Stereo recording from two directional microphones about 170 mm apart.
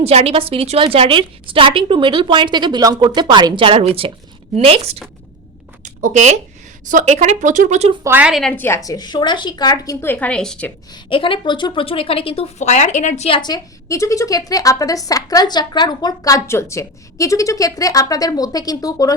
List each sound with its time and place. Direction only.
0.0 s a woman's voice: 35° right (ahead or behind)
8.0 s a woman's voice: 10° right (ahead or behind)
10.9 s a woman's voice: 30° left (ahead or behind)